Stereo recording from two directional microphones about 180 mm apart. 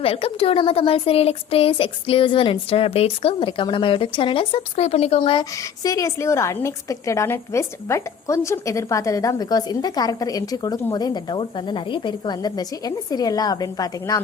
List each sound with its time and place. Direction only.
0.0 s a woman's voice: 30° left (ahead or behind)